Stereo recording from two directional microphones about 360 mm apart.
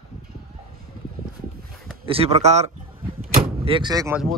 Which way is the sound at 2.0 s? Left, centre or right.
Centre.